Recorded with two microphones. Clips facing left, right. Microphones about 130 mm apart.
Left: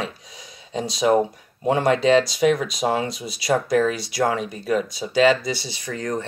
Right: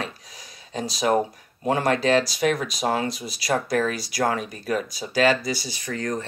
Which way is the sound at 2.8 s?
10° left (ahead or behind).